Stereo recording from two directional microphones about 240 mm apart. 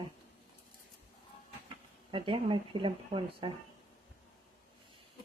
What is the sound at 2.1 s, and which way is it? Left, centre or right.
Speech, right.